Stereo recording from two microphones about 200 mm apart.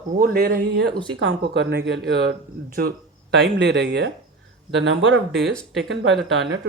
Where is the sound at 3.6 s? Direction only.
55° right (ahead or behind).